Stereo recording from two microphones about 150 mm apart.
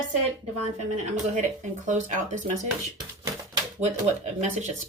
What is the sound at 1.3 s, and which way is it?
Speech, 55° right (ahead or behind).